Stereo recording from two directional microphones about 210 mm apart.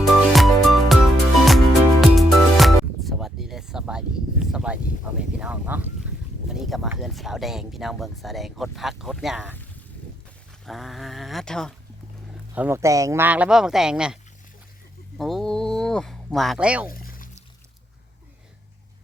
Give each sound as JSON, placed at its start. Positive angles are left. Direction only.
{"t": 0.0, "sound": "music", "side_deg": 0}
{"t": 5.4, "sound": "speech", "side_deg": -5}
{"t": 10.7, "sound": "speech", "side_deg": 0}
{"t": 12.5, "sound": "speech", "side_deg": -10}
{"t": 15.2, "sound": "speech", "side_deg": 0}
{"t": 16.9, "sound": "pour", "side_deg": 45}